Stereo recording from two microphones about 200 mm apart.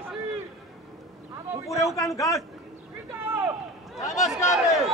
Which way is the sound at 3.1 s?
10° right (ahead or behind).